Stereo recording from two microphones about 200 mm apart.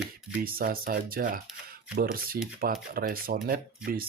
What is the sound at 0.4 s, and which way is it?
Speech, 45° right (ahead or behind).